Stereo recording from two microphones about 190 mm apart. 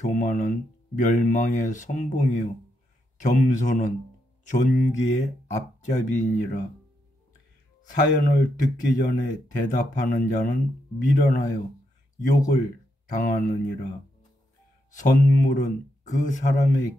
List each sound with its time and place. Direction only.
0.0 s speech: 40° left (ahead or behind)
7.9 s speech: 50° left (ahead or behind)
14.9 s speech: 45° left (ahead or behind)